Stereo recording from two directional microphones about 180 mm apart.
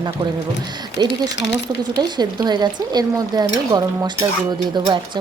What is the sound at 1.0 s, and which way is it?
Speech, 25° right (ahead or behind).